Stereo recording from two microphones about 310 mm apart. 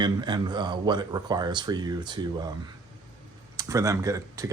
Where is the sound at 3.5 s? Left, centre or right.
Centre.